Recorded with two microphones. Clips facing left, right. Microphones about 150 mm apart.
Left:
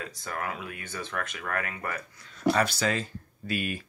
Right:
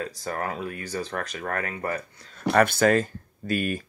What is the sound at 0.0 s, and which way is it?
Speech, 35° right (ahead or behind).